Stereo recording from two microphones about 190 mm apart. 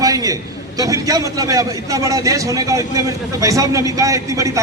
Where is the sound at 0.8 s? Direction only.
20° right (ahead or behind).